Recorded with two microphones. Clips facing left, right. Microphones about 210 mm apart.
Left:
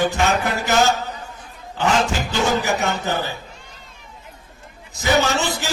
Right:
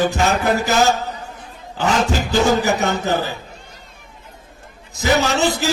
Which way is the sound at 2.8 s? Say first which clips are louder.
Right 3 dB; 35° right (ahead or behind).